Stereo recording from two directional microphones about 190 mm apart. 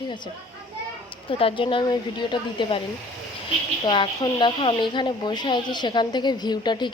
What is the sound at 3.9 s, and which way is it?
Speech, 25° left (ahead or behind).